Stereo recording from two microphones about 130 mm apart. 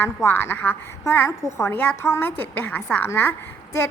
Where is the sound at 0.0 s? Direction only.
15° left (ahead or behind).